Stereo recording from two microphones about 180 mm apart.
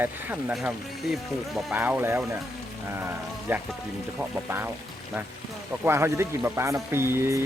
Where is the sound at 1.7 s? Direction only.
10° right (ahead or behind).